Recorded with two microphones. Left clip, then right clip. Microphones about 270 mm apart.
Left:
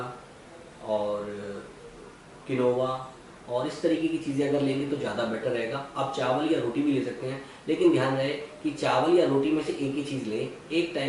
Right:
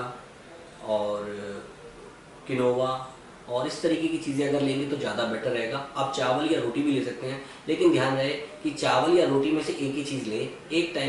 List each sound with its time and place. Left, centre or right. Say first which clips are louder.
0.9 s mantra: right 1 dB; left
2.5 s a man's voice: right 1 dB; centre